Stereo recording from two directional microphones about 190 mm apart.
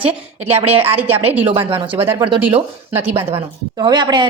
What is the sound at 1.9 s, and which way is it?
Speech, 10° right (ahead or behind).